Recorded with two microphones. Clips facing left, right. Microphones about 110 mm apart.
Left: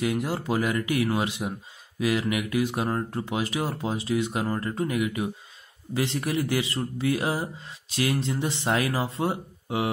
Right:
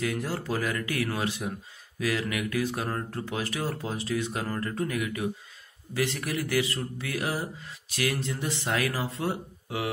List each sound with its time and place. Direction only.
0.0 s speech: 20° left (ahead or behind)